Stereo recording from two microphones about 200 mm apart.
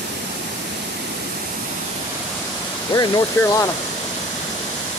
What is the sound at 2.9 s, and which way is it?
Speech, 20° left (ahead or behind).